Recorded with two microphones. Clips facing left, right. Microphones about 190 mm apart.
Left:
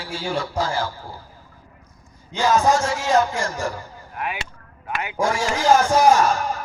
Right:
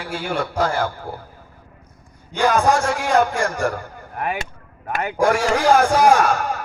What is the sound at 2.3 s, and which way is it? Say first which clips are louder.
A man's voice: right 1 dB; 60° right (ahead or behind).